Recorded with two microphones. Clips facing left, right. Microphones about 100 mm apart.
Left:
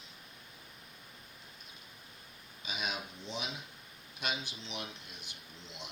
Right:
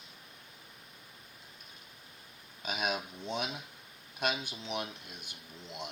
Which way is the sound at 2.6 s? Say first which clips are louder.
Right 5 dB; 50° right (ahead or behind).